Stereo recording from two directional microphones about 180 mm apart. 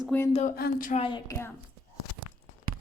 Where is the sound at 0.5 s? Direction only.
55° left (ahead or behind).